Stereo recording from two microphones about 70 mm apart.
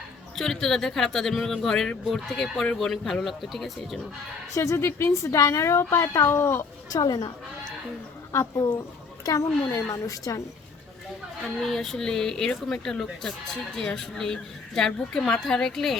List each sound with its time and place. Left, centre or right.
0.3 s speech: centre
4.5 s a woman's voice: left
6.9 s speech: left
8.3 s a woman's voice: left
11.6 s speech: centre